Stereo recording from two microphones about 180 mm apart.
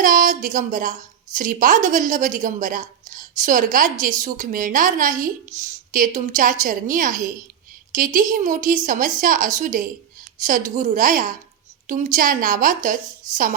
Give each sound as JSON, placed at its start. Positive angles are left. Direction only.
{"t": 0.0, "sound": "a woman's voice", "side_deg": -45}